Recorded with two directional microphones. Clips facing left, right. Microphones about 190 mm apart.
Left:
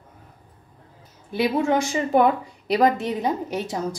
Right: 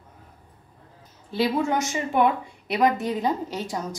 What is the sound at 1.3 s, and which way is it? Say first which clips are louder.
Speech: left 2 dB; 20° left (ahead or behind).